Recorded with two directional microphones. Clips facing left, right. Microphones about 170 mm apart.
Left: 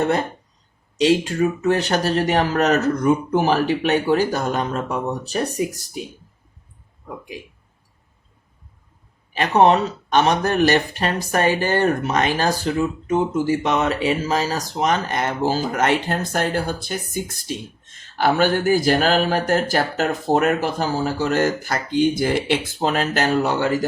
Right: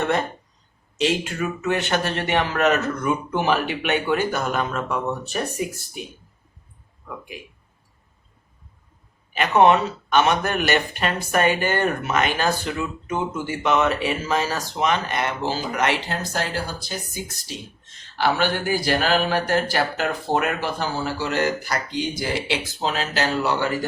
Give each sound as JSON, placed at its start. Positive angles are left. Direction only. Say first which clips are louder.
{"t": 0.9, "sound": "speech", "louder": "left 6 dB", "side_deg": 35}
{"t": 9.3, "sound": "speech", "louder": "left 1 dB", "side_deg": 35}